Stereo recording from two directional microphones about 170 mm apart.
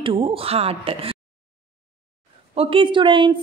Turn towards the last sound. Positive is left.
turn(degrees=-30)  # may be behind; listen again after turning